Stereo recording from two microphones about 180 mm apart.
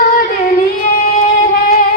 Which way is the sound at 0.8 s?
45° left (ahead or behind).